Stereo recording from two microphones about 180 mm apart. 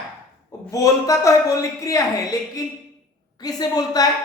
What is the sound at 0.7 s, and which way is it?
Speech, 20° left (ahead or behind).